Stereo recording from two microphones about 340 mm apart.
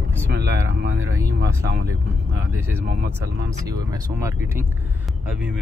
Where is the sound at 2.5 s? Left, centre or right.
Centre.